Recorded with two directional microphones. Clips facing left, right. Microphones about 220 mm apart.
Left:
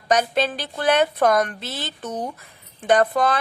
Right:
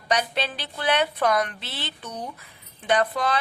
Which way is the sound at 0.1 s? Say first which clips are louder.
Left 6 dB; 45° left (ahead or behind).